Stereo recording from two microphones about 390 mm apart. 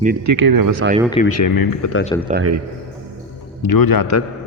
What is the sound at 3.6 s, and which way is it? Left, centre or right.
Speech, left.